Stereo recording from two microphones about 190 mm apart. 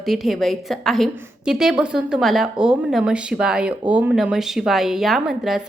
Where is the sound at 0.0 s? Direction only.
Centre (ahead or behind).